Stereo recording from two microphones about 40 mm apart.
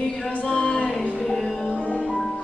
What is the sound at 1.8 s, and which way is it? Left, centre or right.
Music, left.